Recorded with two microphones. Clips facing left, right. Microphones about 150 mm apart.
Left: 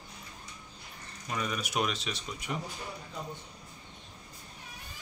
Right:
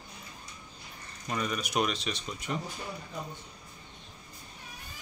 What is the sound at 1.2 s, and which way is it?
Speech, 5° left (ahead or behind).